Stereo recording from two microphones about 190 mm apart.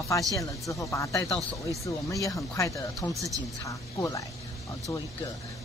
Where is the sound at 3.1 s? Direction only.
15° right (ahead or behind).